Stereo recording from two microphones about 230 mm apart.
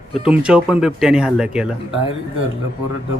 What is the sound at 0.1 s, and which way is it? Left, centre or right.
Speech, centre.